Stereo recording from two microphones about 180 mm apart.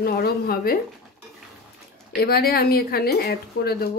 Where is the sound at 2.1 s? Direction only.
60° left (ahead or behind).